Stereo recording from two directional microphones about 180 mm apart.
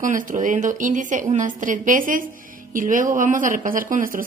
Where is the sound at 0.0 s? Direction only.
45° right (ahead or behind).